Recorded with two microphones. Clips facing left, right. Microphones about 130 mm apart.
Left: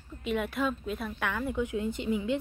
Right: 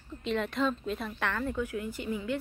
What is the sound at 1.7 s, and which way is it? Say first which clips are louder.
Speech: left 4 dB; 20° left (ahead or behind).